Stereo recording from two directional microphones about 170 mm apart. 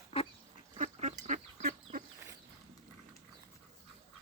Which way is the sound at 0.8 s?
45° right (ahead or behind).